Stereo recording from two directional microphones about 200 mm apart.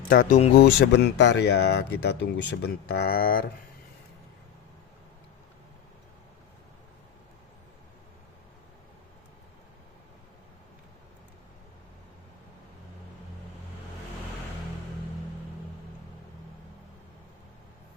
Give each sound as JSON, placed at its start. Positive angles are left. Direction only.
{"t": 0.1, "sound": "speech", "side_deg": 40}
{"t": 0.6, "sound": "speech", "side_deg": 60}